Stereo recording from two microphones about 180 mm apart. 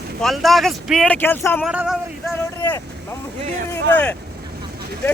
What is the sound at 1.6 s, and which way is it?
Speech, 5° right (ahead or behind).